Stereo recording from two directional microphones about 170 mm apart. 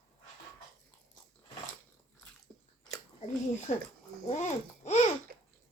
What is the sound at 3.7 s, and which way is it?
Speech, 40° left (ahead or behind).